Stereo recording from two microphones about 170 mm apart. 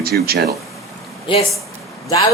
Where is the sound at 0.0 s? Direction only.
65° right (ahead or behind).